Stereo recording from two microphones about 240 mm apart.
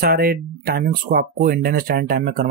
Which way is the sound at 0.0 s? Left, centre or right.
Right.